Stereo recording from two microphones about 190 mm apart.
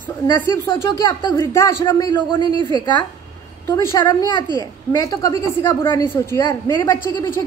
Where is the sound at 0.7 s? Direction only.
20° left (ahead or behind).